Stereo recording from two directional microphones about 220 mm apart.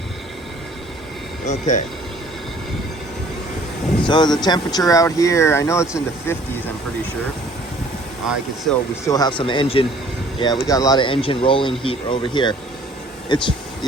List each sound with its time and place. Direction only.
1.5 s speech: 35° left (ahead or behind)
4.0 s speech: 20° left (ahead or behind)
9.0 s speech: 15° left (ahead or behind)